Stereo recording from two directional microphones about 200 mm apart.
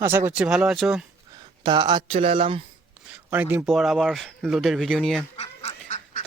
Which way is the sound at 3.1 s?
10° right (ahead or behind).